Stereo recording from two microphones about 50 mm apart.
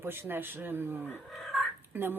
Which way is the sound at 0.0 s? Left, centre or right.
Right.